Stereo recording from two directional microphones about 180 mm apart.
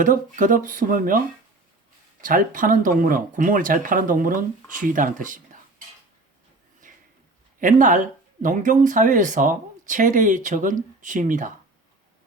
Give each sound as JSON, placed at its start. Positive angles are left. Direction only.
{"t": 0.0, "sound": "speech", "side_deg": -50}
{"t": 2.2, "sound": "speech", "side_deg": -50}
{"t": 7.6, "sound": "speech", "side_deg": -45}